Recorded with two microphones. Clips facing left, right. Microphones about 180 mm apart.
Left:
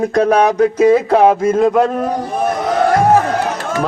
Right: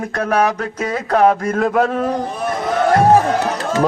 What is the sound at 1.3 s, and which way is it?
Mantra, centre (ahead or behind).